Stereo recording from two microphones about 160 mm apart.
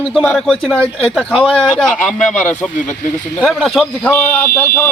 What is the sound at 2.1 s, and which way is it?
Speech, 50° left (ahead or behind).